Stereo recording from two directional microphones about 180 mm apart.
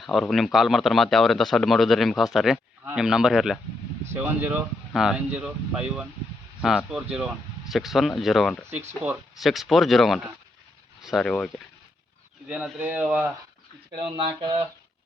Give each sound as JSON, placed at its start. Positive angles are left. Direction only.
{"t": 0.0, "sound": "speech", "side_deg": 0}
{"t": 12.5, "sound": "speech", "side_deg": -5}
{"t": 13.9, "sound": "a sound", "side_deg": -30}